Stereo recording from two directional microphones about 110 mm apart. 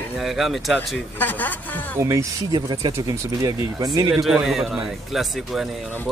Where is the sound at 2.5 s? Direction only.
35° right (ahead or behind).